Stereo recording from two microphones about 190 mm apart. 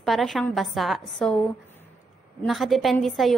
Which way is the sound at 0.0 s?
Centre (ahead or behind).